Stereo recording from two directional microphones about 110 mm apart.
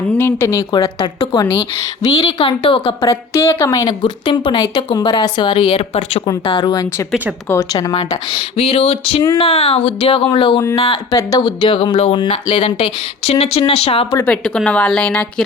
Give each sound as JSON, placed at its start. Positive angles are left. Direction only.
{"t": 0.2, "sound": "speech", "side_deg": 20}
{"t": 0.8, "sound": "a woman's voice", "side_deg": 50}
{"t": 3.0, "sound": "a woman's voice", "side_deg": 25}
{"t": 5.6, "sound": "speech", "side_deg": 80}
{"t": 6.4, "sound": "a woman's voice", "side_deg": 45}
{"t": 7.4, "sound": "a woman's voice", "side_deg": 25}
{"t": 8.3, "sound": "speech", "side_deg": 60}
{"t": 10.3, "sound": "a woman's voice", "side_deg": 50}
{"t": 11.1, "sound": "a woman's voice", "side_deg": 35}
{"t": 11.4, "sound": "a woman's voice", "side_deg": 50}
{"t": 14.3, "sound": "speech", "side_deg": 10}